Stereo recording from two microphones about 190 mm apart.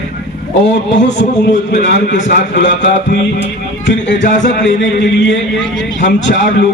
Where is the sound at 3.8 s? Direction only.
70° left (ahead or behind).